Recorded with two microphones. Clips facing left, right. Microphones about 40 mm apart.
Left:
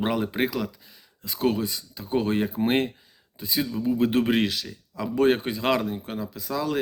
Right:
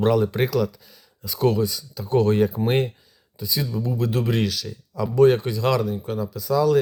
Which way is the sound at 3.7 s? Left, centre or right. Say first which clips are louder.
Left 1 dB; centre.